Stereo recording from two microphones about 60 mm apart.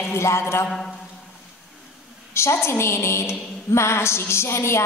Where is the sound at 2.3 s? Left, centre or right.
Left.